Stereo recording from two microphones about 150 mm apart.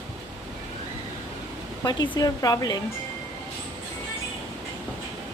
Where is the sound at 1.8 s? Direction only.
25° left (ahead or behind).